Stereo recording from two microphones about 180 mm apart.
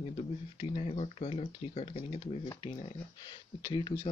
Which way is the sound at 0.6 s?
35° left (ahead or behind).